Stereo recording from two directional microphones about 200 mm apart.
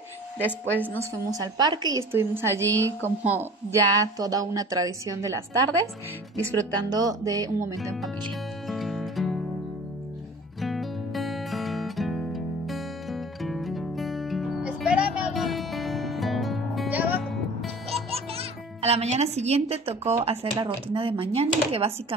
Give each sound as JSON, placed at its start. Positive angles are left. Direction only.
{"t": 1.1, "sound": "a woman's voice", "side_deg": -15}
{"t": 8.6, "sound": "music", "side_deg": 0}
{"t": 10.6, "sound": "music", "side_deg": 0}
{"t": 18.1, "sound": "a child's voice", "side_deg": -30}